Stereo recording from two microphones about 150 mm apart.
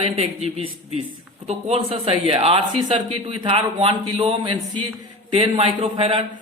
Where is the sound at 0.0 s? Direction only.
40° right (ahead or behind).